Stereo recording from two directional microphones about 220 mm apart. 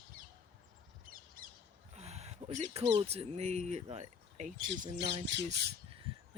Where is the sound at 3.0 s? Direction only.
25° right (ahead or behind).